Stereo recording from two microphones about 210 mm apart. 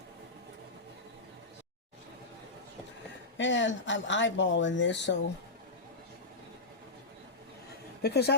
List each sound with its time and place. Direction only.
3.3 s speech: 60° left (ahead or behind)
8.0 s speech: 50° left (ahead or behind)